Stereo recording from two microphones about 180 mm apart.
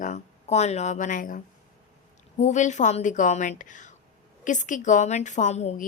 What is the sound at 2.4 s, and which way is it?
A woman's voice, 40° left (ahead or behind).